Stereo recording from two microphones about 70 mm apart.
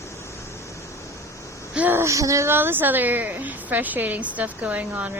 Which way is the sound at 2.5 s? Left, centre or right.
Right.